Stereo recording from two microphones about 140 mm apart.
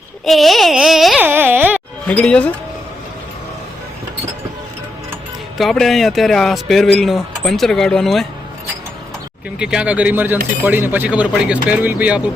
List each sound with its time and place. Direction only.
0.3 s speech: centre (ahead or behind)
1.2 s speech: 15° right (ahead or behind)
2.0 s speech: 10° left (ahead or behind)
5.5 s speech: centre (ahead or behind)
9.6 s speech: 5° right (ahead or behind)